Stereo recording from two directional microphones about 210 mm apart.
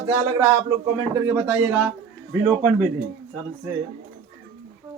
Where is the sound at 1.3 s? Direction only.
10° right (ahead or behind).